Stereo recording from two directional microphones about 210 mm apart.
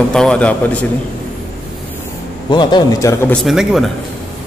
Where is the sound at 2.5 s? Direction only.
20° left (ahead or behind).